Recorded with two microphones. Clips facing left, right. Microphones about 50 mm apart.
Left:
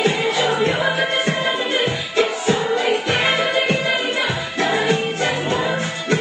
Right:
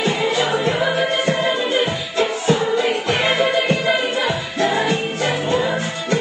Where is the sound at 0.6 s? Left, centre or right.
Left.